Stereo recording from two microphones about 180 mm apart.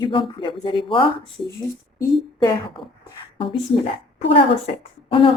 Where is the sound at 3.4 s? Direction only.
30° left (ahead or behind).